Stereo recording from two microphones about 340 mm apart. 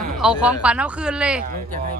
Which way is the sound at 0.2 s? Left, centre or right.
Centre.